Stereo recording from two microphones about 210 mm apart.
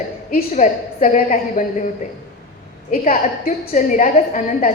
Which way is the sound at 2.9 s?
40° left (ahead or behind).